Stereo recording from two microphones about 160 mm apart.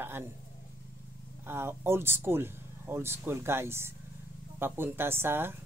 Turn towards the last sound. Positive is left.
turn(degrees=-15)  # may be behind; listen again after turning